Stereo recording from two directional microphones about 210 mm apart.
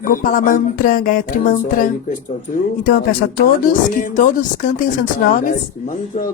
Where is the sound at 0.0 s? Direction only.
40° left (ahead or behind).